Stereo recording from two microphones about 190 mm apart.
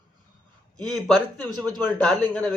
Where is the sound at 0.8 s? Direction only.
Centre (ahead or behind).